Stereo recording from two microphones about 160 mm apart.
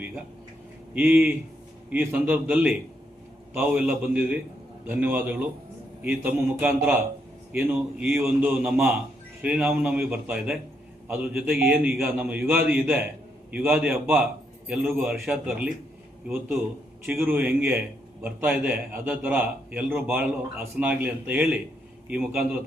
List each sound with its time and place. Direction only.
0.9 s a man's voice: 10° right (ahead or behind)
17.1 s a man's voice: 10° right (ahead or behind)